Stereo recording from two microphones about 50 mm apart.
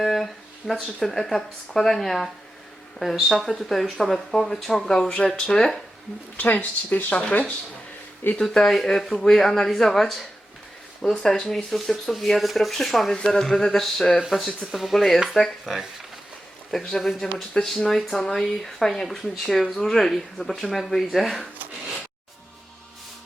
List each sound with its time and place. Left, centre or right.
0.0 s a sound: centre
0.6 s speech: centre
1.3 s speech: centre
6.3 s speech: left
8.4 s speech: centre